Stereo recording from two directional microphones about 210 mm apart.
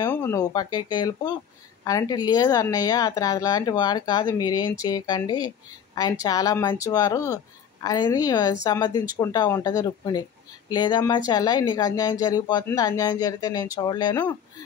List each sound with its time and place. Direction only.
0.1 s speech: 10° left (ahead or behind)